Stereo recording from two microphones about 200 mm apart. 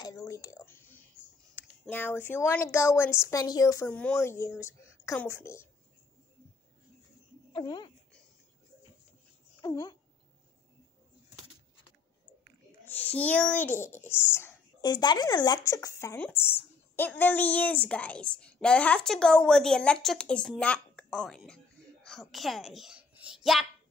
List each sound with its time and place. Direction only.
0.0 s a child's voice: 15° left (ahead or behind)
7.5 s speech: 25° left (ahead or behind)
9.6 s speech: 20° left (ahead or behind)
12.8 s a child's voice: 10° left (ahead or behind)